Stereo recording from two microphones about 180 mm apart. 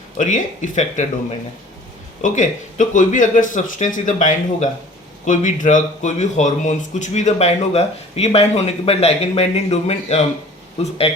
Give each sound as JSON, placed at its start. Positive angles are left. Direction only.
{"t": 0.2, "sound": "speech", "side_deg": 45}
{"t": 2.2, "sound": "speech", "side_deg": 45}